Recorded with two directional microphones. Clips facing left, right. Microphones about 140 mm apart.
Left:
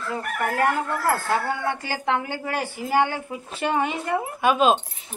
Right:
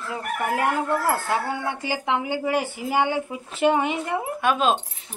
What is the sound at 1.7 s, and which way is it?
Speech, 15° right (ahead or behind).